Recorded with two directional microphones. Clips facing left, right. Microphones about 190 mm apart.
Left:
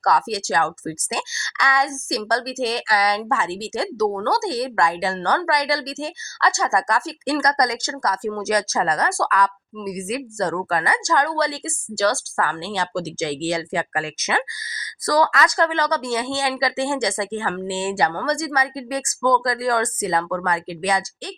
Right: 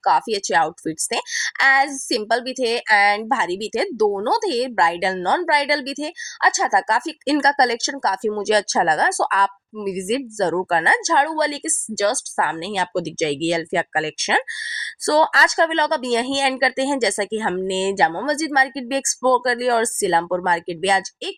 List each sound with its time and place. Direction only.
0.0 s a woman's voice: 25° right (ahead or behind)